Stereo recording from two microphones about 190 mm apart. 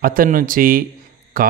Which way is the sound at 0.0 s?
45° right (ahead or behind).